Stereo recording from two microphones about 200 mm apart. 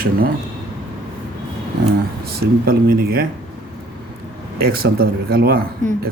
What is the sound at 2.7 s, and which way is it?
Speech, 45° right (ahead or behind).